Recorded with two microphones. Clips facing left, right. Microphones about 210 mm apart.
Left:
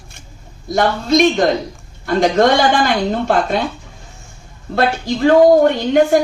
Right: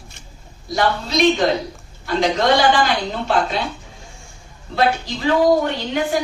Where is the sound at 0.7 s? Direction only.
50° left (ahead or behind).